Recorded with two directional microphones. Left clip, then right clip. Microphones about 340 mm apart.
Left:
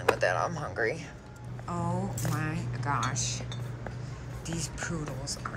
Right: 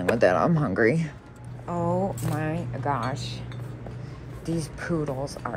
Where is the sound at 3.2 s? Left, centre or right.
Centre.